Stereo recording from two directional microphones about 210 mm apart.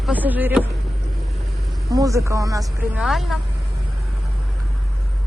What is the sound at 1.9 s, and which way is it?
Speech, 15° right (ahead or behind).